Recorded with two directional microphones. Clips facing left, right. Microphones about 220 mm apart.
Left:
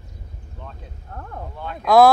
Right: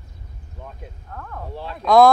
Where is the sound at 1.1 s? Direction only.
30° left (ahead or behind).